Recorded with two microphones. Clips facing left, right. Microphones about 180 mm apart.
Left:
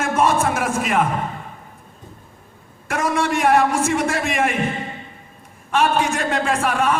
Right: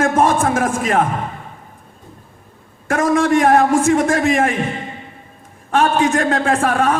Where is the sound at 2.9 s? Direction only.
50° right (ahead or behind).